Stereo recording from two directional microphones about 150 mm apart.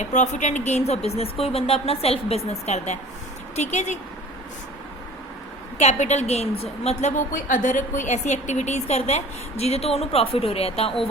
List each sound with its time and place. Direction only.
0.0 s a woman's voice: 55° left (ahead or behind)
5.7 s a woman's voice: 50° left (ahead or behind)